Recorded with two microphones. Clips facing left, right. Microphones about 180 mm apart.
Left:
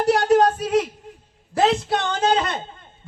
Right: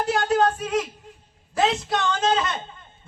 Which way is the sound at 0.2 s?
35° left (ahead or behind).